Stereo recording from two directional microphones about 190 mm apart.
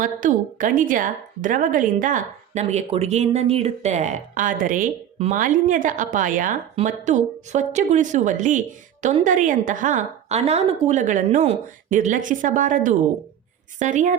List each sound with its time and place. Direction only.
0.0 s a woman's voice: 45° right (ahead or behind)